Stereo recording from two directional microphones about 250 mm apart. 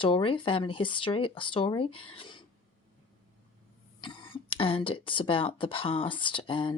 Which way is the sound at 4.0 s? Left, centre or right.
Centre.